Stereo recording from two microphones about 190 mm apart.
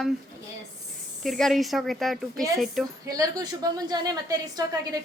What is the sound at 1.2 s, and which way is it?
A woman's voice, centre (ahead or behind).